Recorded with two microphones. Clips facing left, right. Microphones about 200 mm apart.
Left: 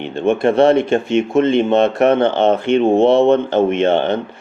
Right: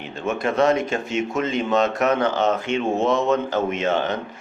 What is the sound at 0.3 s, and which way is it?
Speech, 30° left (ahead or behind).